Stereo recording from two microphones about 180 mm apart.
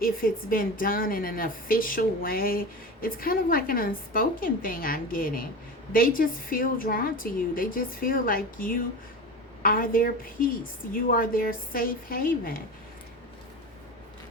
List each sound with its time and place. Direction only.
0.0 s a woman's voice: 55° left (ahead or behind)